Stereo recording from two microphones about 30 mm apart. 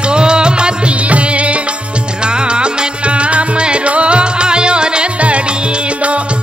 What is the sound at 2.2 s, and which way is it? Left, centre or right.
Music, right.